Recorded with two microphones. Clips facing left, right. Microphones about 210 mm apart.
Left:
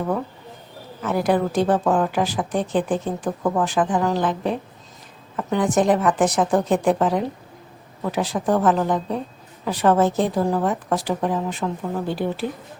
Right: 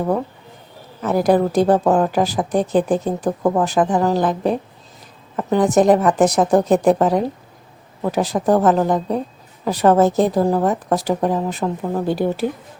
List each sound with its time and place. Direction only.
1.0 s speech: 40° right (ahead or behind)